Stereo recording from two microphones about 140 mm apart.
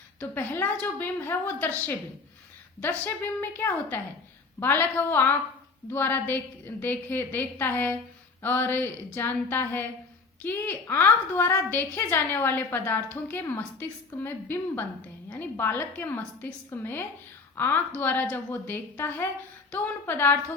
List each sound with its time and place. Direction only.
0.2 s a woman's voice: 15° left (ahead or behind)